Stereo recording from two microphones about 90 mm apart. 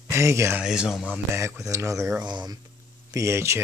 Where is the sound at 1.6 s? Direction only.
35° right (ahead or behind).